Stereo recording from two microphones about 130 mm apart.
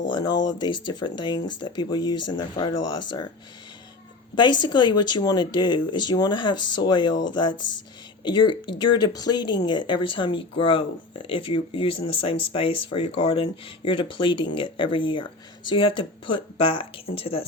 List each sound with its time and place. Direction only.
0.1 s speech: 30° left (ahead or behind)
4.4 s speech: 35° left (ahead or behind)